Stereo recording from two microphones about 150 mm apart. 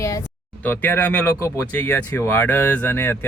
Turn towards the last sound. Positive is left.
turn(degrees=15)  # may be behind; listen again after turning